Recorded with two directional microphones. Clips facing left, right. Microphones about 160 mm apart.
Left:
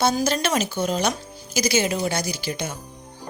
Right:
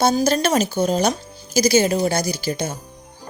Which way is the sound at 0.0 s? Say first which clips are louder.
Right 4 dB; 35° right (ahead or behind).